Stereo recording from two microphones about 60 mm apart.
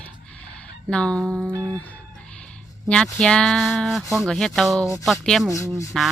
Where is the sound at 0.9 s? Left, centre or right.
Centre.